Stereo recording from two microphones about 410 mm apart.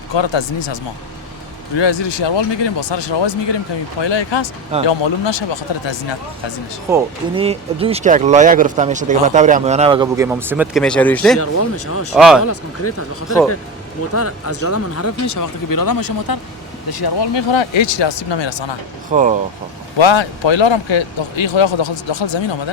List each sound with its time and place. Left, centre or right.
0.1 s speech: left
6.9 s speech: centre
11.3 s speech: left
12.1 s speech: centre
12.5 s speech: left
14.1 s speech: left
19.1 s speech: centre
20.0 s speech: left